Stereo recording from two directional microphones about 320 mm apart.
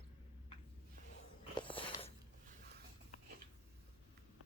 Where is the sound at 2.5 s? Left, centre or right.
Right.